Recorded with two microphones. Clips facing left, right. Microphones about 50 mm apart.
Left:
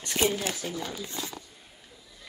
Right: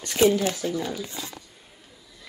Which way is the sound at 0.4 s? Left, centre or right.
Right.